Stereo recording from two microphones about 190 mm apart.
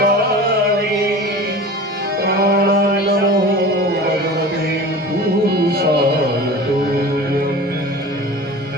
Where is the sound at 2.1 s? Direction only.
55° right (ahead or behind).